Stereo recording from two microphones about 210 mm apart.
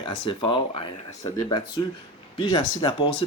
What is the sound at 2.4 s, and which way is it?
Speech, 25° left (ahead or behind).